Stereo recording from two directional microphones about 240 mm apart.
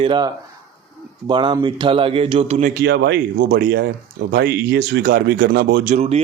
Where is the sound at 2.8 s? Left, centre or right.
Right.